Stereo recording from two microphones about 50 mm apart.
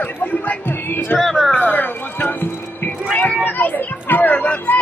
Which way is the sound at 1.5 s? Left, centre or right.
Left.